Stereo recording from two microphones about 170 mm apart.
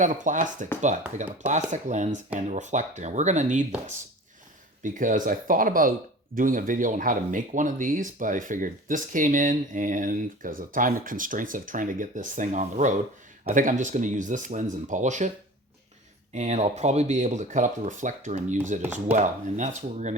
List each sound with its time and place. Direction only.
0.0 s speech: 50° right (ahead or behind)
4.8 s speech: 50° right (ahead or behind)
16.3 s speech: 40° right (ahead or behind)